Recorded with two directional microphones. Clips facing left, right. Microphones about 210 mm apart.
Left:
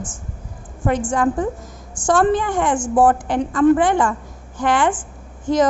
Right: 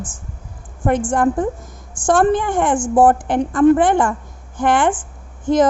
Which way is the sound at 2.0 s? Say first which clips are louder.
Right 2 dB; 50° right (ahead or behind).